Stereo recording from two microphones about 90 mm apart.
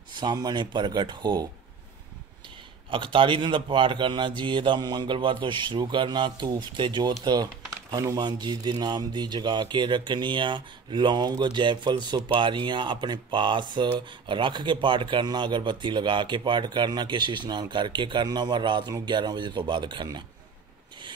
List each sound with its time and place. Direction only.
0.1 s speech: 55° right (ahead or behind)
2.9 s speech: 70° right (ahead or behind)